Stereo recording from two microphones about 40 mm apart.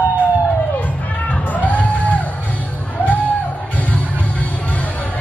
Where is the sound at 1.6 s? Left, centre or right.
Left.